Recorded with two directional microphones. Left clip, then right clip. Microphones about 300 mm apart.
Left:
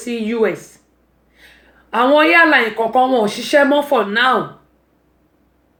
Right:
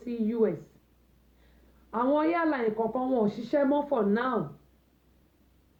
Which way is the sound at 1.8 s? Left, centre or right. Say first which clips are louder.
Left 14 dB; centre.